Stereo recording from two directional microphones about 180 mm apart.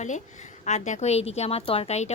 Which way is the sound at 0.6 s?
40° left (ahead or behind).